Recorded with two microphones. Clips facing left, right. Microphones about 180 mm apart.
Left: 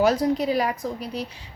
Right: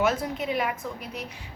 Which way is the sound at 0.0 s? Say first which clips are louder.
Left 6 dB; 35° left (ahead or behind).